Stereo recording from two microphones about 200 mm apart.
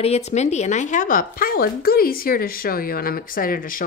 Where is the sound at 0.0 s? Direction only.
30° left (ahead or behind).